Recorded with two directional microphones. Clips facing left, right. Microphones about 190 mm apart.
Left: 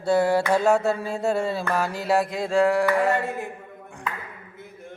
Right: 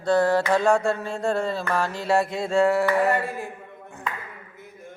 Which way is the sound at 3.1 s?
20° left (ahead or behind).